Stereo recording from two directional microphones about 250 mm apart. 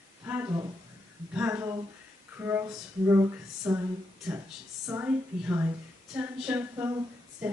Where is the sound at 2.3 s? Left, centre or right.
Centre.